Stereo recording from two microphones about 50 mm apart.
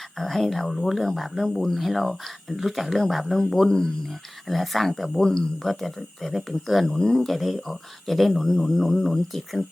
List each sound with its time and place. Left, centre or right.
0.2 s speech: centre
6.9 s speech: centre
7.2 s speech: centre